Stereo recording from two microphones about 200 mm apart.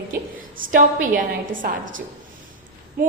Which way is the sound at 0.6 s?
40° right (ahead or behind).